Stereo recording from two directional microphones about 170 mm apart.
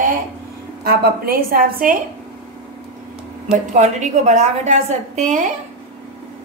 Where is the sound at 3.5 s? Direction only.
45° right (ahead or behind).